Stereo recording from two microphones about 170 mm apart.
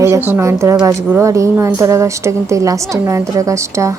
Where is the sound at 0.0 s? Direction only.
15° right (ahead or behind).